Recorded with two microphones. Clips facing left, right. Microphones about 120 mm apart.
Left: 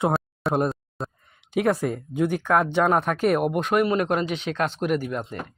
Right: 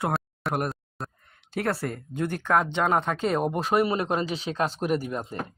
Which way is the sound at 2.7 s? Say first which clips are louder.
Left 3 dB; 15° right (ahead or behind).